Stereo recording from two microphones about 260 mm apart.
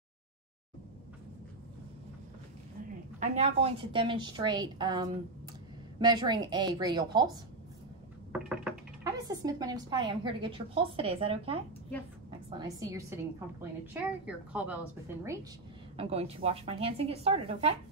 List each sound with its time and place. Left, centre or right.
3.2 s a woman's voice: right
8.3 s knock: centre
9.3 s a woman's voice: centre
16.0 s a woman's voice: right